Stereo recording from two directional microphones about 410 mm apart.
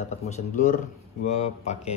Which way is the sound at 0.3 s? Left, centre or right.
Centre.